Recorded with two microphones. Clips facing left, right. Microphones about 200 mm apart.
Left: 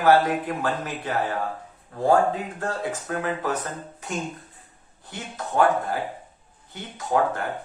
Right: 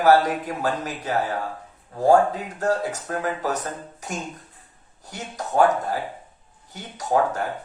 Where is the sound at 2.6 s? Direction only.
40° right (ahead or behind).